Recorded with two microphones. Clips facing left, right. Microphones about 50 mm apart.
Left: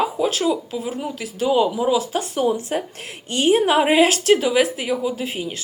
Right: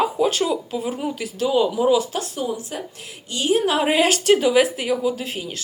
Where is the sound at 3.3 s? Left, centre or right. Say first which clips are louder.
Left 3 dB; left.